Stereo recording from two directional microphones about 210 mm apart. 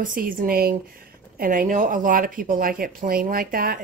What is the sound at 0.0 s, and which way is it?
Speech, 40° right (ahead or behind).